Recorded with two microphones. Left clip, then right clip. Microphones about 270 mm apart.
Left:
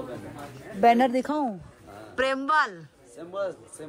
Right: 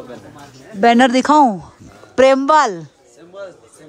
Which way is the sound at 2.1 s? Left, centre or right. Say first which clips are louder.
Right 13 dB; centre.